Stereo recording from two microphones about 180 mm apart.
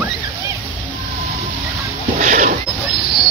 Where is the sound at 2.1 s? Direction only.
45° right (ahead or behind).